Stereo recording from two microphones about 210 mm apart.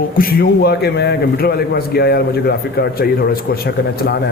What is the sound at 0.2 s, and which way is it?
A man's voice, 45° left (ahead or behind).